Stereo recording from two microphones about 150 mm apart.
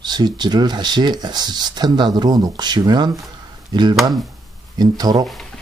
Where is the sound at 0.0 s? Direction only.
30° right (ahead or behind).